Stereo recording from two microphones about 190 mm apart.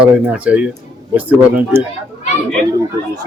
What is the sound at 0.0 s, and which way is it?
Speech, 10° right (ahead or behind).